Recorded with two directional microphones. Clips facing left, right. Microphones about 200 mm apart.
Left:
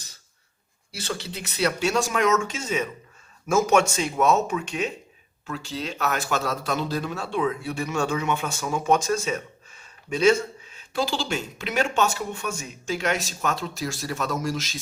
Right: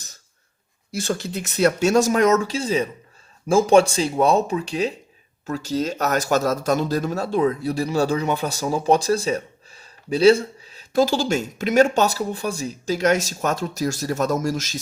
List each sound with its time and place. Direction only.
0.9 s speech: 45° right (ahead or behind)